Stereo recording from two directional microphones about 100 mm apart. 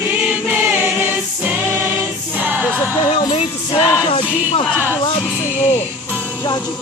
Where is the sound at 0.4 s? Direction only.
20° right (ahead or behind).